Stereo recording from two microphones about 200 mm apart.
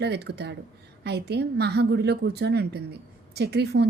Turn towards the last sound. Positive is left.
turn(degrees=-55)  # may be behind; listen again after turning